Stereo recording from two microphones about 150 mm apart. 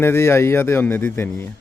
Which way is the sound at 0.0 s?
15° left (ahead or behind).